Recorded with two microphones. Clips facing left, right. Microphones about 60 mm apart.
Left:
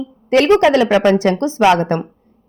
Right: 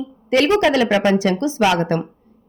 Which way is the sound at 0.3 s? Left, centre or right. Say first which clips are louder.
Left 4 dB; left.